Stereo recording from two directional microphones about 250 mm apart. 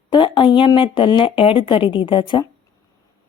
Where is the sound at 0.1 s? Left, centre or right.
Centre.